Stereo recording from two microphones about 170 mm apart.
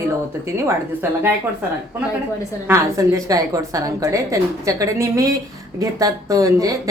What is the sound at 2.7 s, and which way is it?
A woman's voice, 20° right (ahead or behind).